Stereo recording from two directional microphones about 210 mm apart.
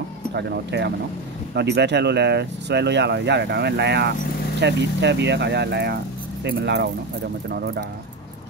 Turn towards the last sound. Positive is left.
turn(degrees=-50)  # may be behind; listen again after turning